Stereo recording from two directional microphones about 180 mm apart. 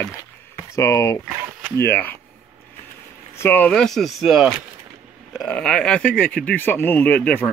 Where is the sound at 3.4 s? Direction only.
10° left (ahead or behind).